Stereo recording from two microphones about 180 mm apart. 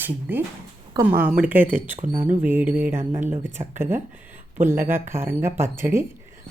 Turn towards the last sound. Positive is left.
turn(degrees=-15)  # may be behind; listen again after turning